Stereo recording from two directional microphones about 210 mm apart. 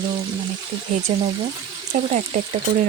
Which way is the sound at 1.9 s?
30° right (ahead or behind).